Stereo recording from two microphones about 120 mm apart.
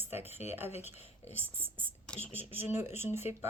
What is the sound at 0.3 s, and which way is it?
Speech, 20° right (ahead or behind).